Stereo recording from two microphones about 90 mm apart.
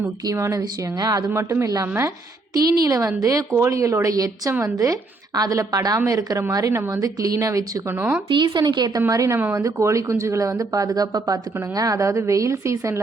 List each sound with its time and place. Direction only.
0.3 s a woman's voice: 40° right (ahead or behind)
1.3 s a woman's voice: 30° right (ahead or behind)
8.3 s a woman's voice: 55° right (ahead or behind)
9.0 s a woman's voice: 35° right (ahead or behind)
9.4 s speech: 20° right (ahead or behind)
9.6 s a woman's voice: 35° right (ahead or behind)